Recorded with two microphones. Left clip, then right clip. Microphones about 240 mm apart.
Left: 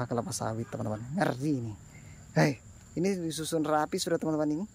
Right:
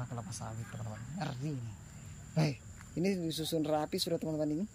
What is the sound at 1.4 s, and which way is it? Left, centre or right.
Speech, centre.